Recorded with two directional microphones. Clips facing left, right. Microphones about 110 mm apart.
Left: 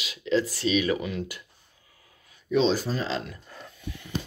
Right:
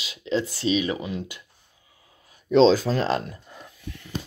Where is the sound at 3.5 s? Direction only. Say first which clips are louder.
Even; 15° right (ahead or behind).